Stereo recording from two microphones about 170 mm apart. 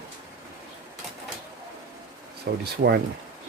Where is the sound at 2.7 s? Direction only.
70° right (ahead or behind).